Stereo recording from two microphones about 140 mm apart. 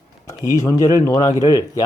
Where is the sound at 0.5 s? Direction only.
20° left (ahead or behind).